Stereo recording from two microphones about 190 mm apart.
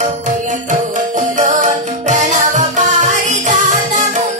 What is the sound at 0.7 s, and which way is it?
Music, 40° right (ahead or behind).